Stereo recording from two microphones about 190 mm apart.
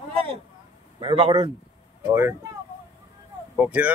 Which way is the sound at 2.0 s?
15° right (ahead or behind).